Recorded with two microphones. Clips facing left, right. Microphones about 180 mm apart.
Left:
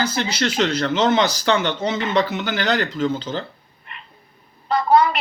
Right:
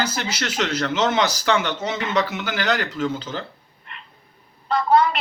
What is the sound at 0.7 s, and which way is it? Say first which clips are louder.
Speech: left 2 dB; 5° right (ahead or behind).